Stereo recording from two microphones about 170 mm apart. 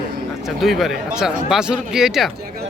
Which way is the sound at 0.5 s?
Centre (ahead or behind).